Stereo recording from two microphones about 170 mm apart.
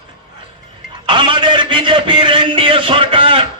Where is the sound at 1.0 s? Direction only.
30° right (ahead or behind).